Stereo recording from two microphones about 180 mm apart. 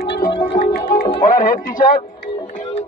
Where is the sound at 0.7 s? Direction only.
50° left (ahead or behind).